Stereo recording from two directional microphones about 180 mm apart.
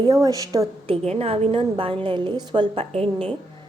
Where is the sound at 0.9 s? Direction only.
35° right (ahead or behind).